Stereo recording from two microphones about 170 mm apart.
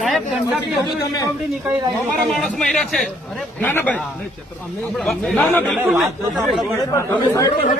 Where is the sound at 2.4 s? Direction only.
5° left (ahead or behind).